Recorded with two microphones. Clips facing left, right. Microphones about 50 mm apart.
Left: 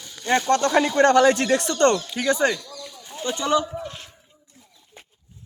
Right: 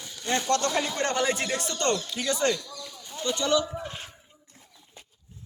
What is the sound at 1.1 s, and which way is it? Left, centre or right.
Speech, left.